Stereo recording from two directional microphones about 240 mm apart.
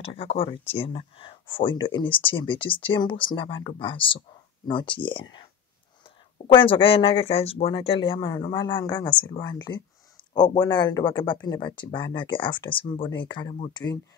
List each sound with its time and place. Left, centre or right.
0.0 s speech: left